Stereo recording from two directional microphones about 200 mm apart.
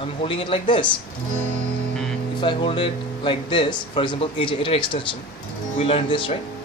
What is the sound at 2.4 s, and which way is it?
A man's voice, 25° left (ahead or behind).